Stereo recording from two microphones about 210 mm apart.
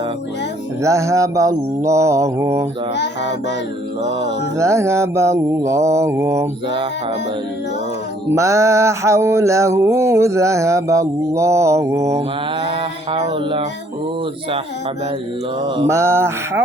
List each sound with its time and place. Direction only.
0.8 s mantra: 15° right (ahead or behind)
4.5 s mantra: 15° right (ahead or behind)
8.3 s mantra: 15° right (ahead or behind)
12.6 s mantra: 25° right (ahead or behind)
15.6 s mantra: 20° right (ahead or behind)